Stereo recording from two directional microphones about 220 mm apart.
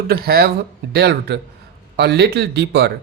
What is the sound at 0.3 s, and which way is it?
Speech, 45° right (ahead or behind).